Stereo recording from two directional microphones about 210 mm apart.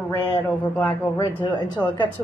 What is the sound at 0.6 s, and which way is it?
Speech, 5° left (ahead or behind).